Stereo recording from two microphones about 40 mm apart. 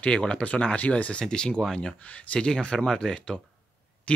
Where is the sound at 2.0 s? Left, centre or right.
Left.